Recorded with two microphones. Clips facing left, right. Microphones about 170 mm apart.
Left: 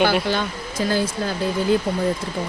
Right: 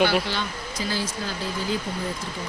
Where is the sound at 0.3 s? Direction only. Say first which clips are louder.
Left 6 dB; 50° left (ahead or behind).